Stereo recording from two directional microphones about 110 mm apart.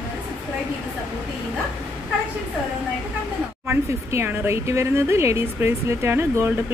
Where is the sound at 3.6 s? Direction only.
20° right (ahead or behind).